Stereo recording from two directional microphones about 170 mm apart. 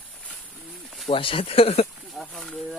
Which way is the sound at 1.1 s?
35° left (ahead or behind).